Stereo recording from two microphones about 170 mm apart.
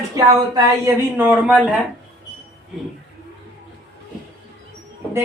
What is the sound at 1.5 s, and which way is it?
Speech, centre (ahead or behind).